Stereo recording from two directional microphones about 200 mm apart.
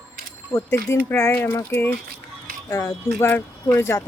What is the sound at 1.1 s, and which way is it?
Speech, 10° left (ahead or behind).